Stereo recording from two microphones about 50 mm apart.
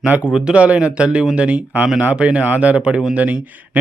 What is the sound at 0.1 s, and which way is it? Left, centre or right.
Speech, right.